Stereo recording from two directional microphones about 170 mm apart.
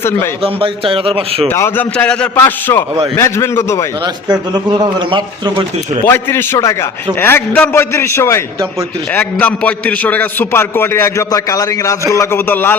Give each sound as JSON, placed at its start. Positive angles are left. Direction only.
{"t": 0.4, "sound": "a man's voice", "side_deg": -30}
{"t": 1.5, "sound": "a man's voice", "side_deg": 15}
{"t": 4.0, "sound": "speech", "side_deg": -25}
{"t": 6.1, "sound": "a man's voice", "side_deg": 15}